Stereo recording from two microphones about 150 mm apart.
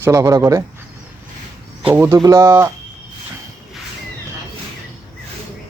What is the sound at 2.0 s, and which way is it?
Speech, 20° right (ahead or behind).